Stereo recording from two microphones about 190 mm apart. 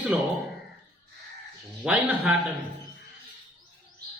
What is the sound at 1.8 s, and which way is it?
Speech, 5° right (ahead or behind).